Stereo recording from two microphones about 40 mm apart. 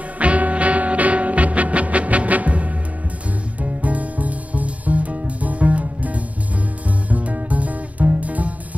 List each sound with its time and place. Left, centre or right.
0.2 s music: right